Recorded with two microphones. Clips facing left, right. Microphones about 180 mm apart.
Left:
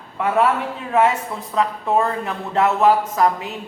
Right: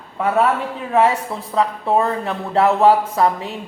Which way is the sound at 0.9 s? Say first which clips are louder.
Right 1 dB; 35° right (ahead or behind).